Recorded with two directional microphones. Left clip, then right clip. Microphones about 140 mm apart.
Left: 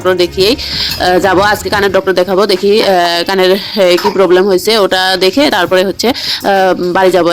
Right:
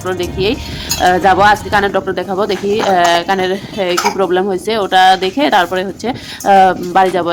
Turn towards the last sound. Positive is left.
turn(degrees=30)  # may be behind; listen again after turning